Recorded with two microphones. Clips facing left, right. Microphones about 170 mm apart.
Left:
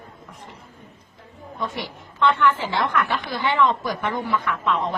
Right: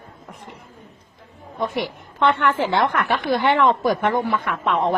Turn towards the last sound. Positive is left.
turn(degrees=-55)  # may be behind; listen again after turning